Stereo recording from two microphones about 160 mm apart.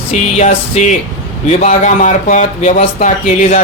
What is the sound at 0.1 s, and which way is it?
Speech, 45° left (ahead or behind).